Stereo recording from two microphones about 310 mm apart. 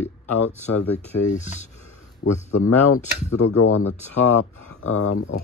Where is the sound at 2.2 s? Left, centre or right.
Left.